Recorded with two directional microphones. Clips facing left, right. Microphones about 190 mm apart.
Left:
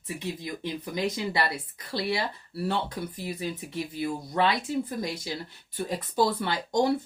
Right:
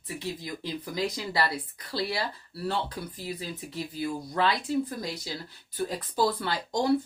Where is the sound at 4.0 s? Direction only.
25° left (ahead or behind).